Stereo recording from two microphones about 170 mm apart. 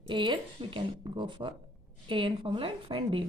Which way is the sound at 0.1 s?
30° right (ahead or behind).